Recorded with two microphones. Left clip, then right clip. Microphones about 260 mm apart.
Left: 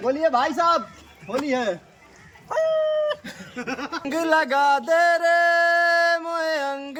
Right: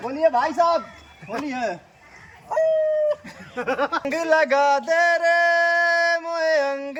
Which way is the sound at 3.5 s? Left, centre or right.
Centre.